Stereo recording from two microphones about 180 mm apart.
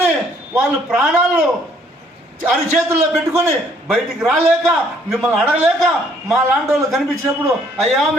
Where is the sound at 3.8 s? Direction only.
Centre (ahead or behind).